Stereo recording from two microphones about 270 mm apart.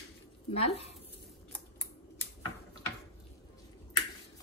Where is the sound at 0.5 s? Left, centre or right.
Left.